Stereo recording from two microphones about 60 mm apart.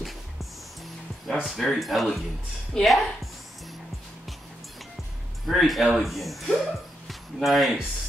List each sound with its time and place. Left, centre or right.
1.2 s speech: centre
5.5 s speech: centre